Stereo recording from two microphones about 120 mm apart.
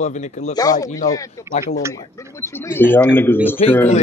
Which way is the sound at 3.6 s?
65° left (ahead or behind).